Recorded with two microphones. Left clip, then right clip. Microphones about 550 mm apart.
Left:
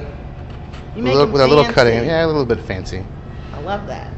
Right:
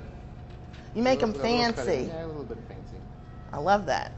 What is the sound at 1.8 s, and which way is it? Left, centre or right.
Speech, left.